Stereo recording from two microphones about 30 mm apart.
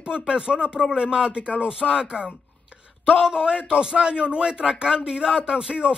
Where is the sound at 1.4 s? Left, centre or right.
Right.